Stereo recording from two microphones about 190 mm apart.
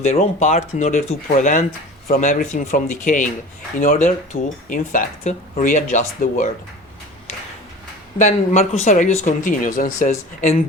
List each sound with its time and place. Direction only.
0.0 s speech: 35° left (ahead or behind)
8.2 s speech: 40° left (ahead or behind)